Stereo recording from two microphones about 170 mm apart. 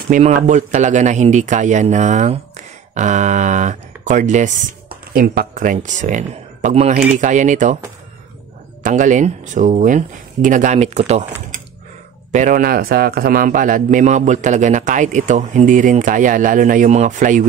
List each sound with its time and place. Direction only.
0.1 s a man's voice: 45° right (ahead or behind)
5.1 s a man's voice: 60° right (ahead or behind)
8.8 s a man's voice: 50° right (ahead or behind)
12.3 s a man's voice: 50° right (ahead or behind)